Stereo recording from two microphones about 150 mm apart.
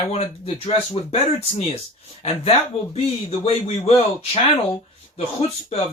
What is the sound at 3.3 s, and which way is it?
Speech, 45° left (ahead or behind).